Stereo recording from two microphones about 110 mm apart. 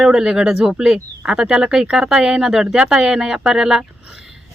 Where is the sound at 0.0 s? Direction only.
5° right (ahead or behind).